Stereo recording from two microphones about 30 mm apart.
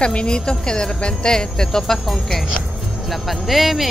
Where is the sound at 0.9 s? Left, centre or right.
Left.